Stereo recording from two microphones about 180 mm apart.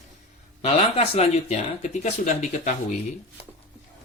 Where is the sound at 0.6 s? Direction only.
35° left (ahead or behind).